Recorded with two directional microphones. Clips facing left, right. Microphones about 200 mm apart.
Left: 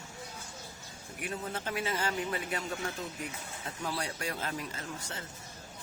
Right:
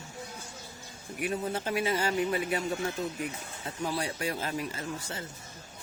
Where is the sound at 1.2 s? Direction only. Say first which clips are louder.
Right 6 dB; 15° right (ahead or behind).